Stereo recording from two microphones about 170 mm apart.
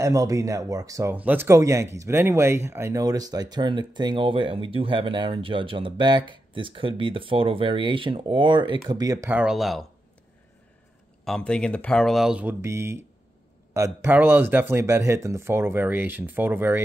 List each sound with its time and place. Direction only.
0.0 s speech: 20° right (ahead or behind)
9.3 s speech: 5° right (ahead or behind)
11.2 s speech: 5° left (ahead or behind); by 16.8 s 10° right (ahead or behind)